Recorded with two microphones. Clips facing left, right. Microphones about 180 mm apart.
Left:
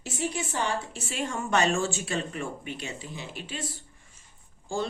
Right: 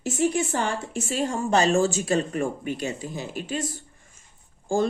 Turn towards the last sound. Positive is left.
turn(degrees=-45)  # may be behind; listen again after turning